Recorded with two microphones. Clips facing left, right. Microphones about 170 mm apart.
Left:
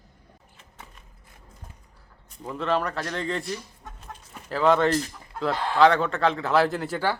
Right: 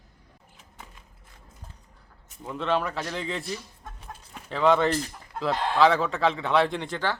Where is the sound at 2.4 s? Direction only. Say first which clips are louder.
Left 1 dB; centre (ahead or behind).